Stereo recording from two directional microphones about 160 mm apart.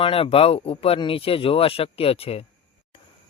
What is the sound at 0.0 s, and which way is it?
Speech, 35° left (ahead or behind).